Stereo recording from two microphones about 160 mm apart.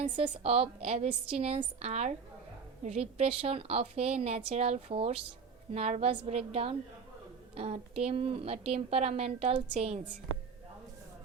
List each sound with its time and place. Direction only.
0.0 s a woman's voice: 40° right (ahead or behind)